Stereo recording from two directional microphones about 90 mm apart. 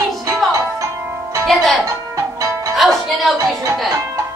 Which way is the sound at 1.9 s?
35° right (ahead or behind).